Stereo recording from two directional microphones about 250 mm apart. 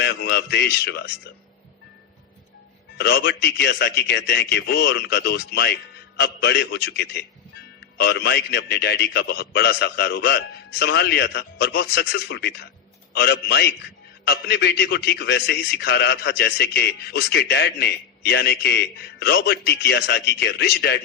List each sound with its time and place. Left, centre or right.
0.0 s a man's voice: left
3.0 s a man's voice: left